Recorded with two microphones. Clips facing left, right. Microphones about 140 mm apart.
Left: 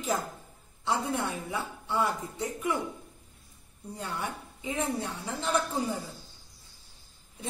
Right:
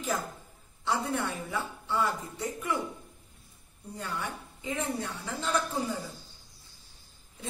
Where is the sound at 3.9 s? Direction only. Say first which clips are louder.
Left 1 dB; 20° left (ahead or behind).